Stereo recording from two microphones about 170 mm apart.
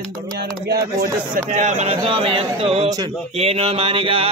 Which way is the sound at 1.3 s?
45° right (ahead or behind).